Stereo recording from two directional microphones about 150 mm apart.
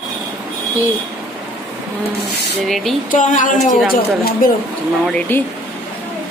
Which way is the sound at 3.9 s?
75° left (ahead or behind).